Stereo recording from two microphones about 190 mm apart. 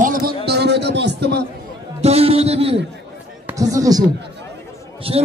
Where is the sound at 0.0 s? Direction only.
45° right (ahead or behind).